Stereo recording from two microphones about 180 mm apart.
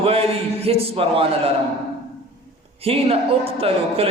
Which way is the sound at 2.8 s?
35° right (ahead or behind).